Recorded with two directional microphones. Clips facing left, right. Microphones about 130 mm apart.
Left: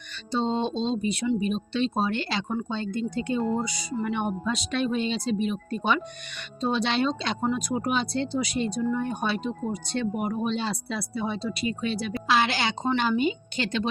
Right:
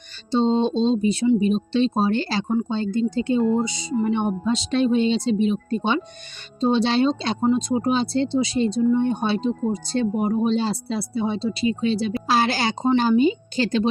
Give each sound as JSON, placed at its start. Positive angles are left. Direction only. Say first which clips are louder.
{"t": 0.3, "sound": "speech", "louder": "right 7 dB", "side_deg": -30}